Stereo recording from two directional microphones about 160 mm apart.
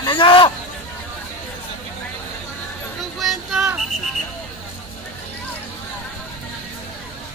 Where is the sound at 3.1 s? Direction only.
5° right (ahead or behind).